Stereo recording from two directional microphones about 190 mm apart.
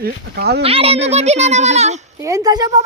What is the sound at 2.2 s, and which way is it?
Speech, 20° right (ahead or behind).